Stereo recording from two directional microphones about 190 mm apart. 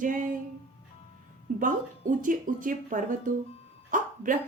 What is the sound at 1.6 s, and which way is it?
Speech, 45° right (ahead or behind).